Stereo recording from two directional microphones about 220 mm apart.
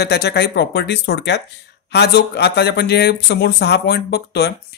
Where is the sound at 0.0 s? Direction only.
45° left (ahead or behind).